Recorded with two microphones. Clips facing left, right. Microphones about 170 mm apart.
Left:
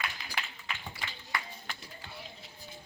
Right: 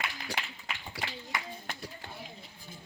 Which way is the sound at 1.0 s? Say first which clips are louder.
Right 5 dB; 80° right.